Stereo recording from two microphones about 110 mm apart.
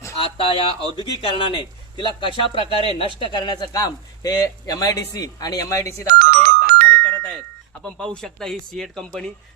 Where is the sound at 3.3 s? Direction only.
40° left (ahead or behind).